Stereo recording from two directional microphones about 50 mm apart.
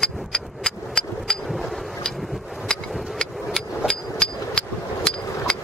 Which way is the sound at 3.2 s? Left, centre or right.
Centre.